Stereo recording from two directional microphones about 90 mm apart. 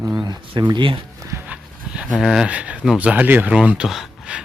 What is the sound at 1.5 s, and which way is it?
Dog, 10° right (ahead or behind).